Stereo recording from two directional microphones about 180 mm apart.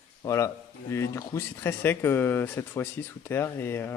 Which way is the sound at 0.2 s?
15° left (ahead or behind).